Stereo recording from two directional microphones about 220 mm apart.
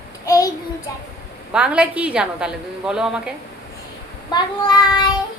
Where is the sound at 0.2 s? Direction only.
15° left (ahead or behind).